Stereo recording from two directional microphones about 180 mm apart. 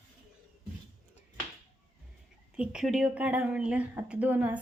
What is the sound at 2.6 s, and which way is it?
Speech, 5° right (ahead or behind).